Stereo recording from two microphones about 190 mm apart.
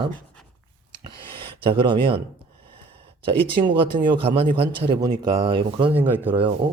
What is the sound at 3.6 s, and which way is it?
Speech, 25° right (ahead or behind).